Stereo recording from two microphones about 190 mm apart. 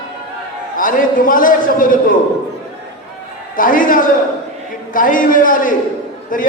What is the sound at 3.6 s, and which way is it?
A man's voice, 45° left (ahead or behind).